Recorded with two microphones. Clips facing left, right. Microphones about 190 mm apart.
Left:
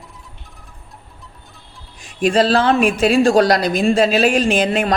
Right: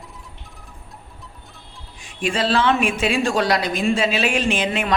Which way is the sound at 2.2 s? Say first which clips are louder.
Left 5 dB; 40° left (ahead or behind).